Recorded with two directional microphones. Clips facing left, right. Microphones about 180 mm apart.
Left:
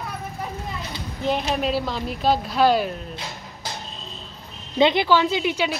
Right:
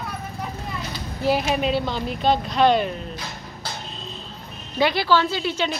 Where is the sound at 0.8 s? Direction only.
Centre (ahead or behind).